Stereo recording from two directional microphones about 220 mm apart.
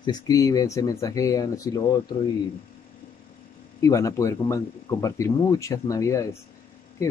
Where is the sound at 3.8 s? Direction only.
15° left (ahead or behind).